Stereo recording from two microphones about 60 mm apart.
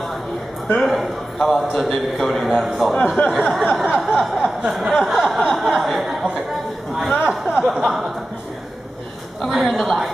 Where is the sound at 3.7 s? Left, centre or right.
Centre.